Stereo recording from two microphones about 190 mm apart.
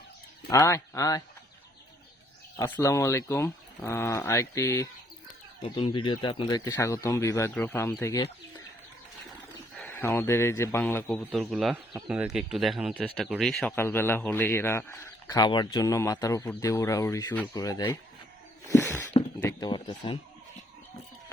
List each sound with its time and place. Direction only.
0.5 s a man's voice: 15° left (ahead or behind)
2.6 s a man's voice: 15° left (ahead or behind)
5.6 s a man's voice: 25° left (ahead or behind); by 8.1 s 10° left (ahead or behind)
9.7 s a man's voice: 10° left (ahead or behind)
11.2 s a man's voice: centre (ahead or behind); by 17.9 s 20° left (ahead or behind)
18.6 s a sound: 15° left (ahead or behind)
19.4 s speech: 15° left (ahead or behind)